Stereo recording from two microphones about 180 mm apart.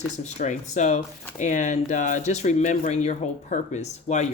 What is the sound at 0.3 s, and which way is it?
Speech, 40° left (ahead or behind).